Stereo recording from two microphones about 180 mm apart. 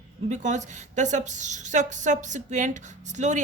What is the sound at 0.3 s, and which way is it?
A woman's voice, 40° right (ahead or behind).